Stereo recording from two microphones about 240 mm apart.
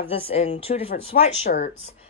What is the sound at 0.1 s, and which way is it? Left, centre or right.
Speech, left.